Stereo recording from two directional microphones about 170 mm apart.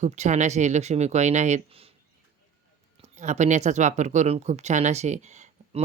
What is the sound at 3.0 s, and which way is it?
Speech, 45° right (ahead or behind).